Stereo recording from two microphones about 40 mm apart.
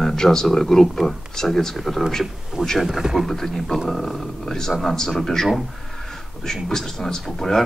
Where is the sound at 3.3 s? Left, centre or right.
Centre.